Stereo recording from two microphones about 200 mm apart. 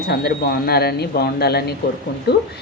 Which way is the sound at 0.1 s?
55° left (ahead or behind).